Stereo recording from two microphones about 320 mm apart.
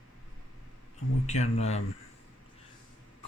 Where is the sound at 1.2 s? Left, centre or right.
Left.